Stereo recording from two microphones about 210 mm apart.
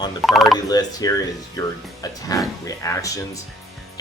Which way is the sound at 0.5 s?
15° left (ahead or behind).